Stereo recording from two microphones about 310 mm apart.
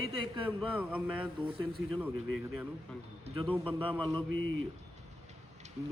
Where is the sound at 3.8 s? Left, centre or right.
Centre.